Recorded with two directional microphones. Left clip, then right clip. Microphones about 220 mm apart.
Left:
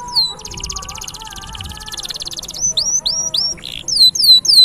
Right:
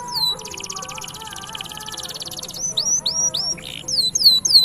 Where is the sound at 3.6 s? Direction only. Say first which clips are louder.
Left 13 dB; 25° left (ahead or behind).